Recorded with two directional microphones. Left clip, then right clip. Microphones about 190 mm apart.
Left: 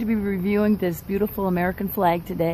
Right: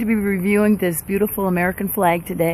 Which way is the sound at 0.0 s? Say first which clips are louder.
Right 5 dB; 20° right (ahead or behind).